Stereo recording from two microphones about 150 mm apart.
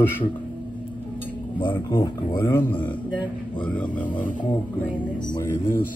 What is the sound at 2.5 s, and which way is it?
A man's voice, 15° left (ahead or behind).